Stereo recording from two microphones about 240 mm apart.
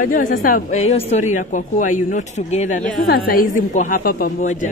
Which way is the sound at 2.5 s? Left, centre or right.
Left.